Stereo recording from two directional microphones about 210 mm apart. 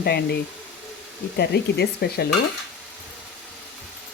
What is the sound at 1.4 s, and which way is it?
Speech, 50° left (ahead or behind).